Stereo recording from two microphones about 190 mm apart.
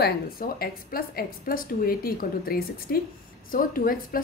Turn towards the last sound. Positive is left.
turn(degrees=50)  # may be behind; listen again after turning